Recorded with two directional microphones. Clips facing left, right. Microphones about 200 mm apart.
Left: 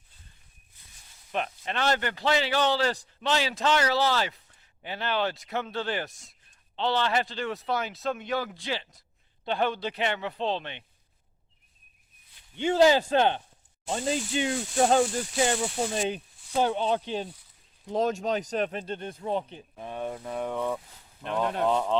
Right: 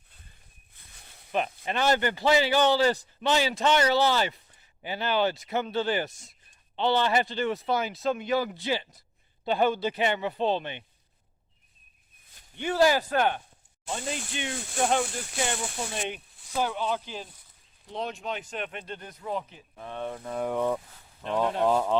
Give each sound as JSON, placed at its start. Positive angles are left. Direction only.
{"t": 0.7, "sound": "a sound", "side_deg": -60}
{"t": 1.3, "sound": "speech", "side_deg": -5}
{"t": 12.5, "sound": "speech", "side_deg": 20}
{"t": 17.8, "sound": "speech", "side_deg": 45}
{"t": 19.7, "sound": "speech", "side_deg": 15}
{"t": 20.4, "sound": "speech", "side_deg": -10}